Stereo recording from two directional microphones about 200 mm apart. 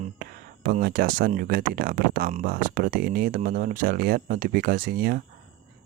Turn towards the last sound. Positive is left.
turn(degrees=-50)  # may be behind; listen again after turning